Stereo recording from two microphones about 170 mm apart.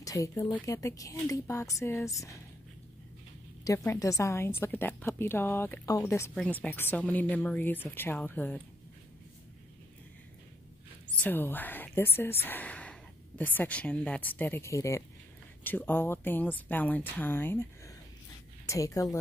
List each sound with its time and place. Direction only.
0.0 s speech: 20° left (ahead or behind)
3.6 s a woman's voice: 15° left (ahead or behind)
11.1 s a woman's voice: 10° left (ahead or behind)